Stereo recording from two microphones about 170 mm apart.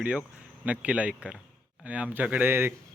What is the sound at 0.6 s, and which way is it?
A man's voice, 5° right (ahead or behind).